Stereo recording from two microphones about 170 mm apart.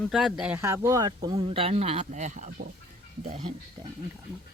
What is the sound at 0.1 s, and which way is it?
Speech, centre (ahead or behind).